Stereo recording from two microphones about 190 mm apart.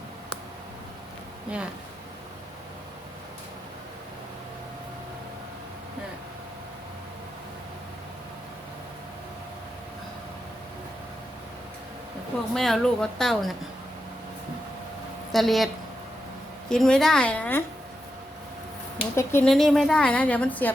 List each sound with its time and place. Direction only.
12.5 s a woman's voice: centre (ahead or behind)
15.3 s a woman's voice: centre (ahead or behind)
19.1 s speech: 15° left (ahead or behind)
19.5 s a woman's voice: centre (ahead or behind)